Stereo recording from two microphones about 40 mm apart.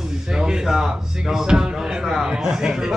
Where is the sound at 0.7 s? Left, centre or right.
Centre.